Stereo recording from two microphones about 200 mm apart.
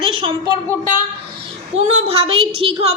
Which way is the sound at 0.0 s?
25° right (ahead or behind).